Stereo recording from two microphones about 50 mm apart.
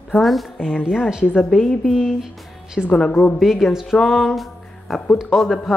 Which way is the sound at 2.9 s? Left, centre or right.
Left.